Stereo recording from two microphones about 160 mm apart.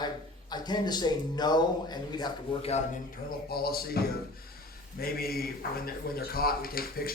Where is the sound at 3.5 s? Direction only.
70° left (ahead or behind).